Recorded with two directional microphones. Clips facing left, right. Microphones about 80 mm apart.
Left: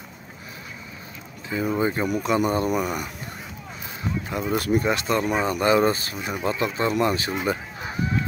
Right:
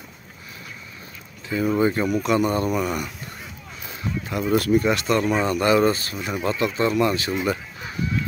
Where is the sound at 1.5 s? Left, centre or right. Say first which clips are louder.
Right 3 dB; centre.